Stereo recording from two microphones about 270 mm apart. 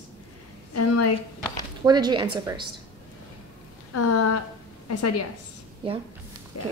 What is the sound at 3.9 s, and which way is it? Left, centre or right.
A woman's voice, left.